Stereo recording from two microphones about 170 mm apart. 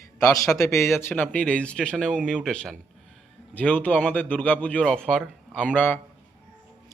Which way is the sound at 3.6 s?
10° left (ahead or behind).